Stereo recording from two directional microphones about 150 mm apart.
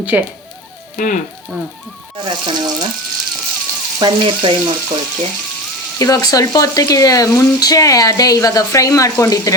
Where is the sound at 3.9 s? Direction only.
30° right (ahead or behind).